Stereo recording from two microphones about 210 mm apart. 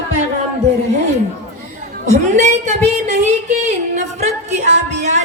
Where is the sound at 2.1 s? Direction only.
35° right (ahead or behind).